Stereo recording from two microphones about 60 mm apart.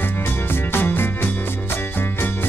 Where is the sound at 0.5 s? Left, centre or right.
Left.